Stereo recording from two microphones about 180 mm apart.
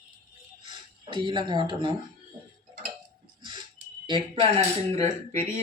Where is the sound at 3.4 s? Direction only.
25° right (ahead or behind).